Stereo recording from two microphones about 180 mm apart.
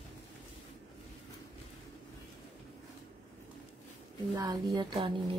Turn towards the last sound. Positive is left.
turn(degrees=-25)  # may be behind; listen again after turning